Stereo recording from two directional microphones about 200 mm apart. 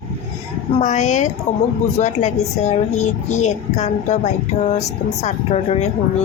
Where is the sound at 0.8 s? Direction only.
35° left (ahead or behind).